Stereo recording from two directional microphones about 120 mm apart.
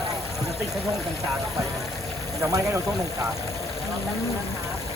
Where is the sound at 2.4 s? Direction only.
25° right (ahead or behind).